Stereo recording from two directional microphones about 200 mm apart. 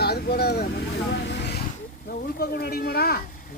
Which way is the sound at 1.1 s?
60° left (ahead or behind).